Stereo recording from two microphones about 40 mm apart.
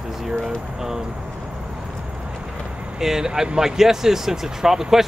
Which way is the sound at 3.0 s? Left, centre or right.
Centre.